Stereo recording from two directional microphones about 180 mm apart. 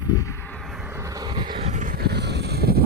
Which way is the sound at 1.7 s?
45° right (ahead or behind).